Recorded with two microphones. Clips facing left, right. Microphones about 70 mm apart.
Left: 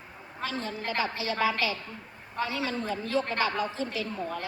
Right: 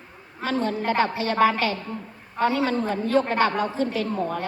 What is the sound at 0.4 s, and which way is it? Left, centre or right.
A woman's voice, right.